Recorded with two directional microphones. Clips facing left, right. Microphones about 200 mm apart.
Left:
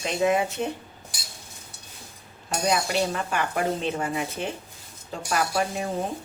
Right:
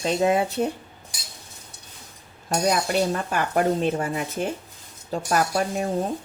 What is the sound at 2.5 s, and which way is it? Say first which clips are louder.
Speech: right 3 dB; 45° right (ahead or behind).